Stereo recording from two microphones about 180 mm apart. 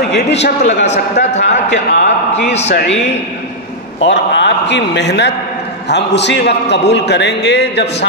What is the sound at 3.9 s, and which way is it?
A man's voice, 85° left.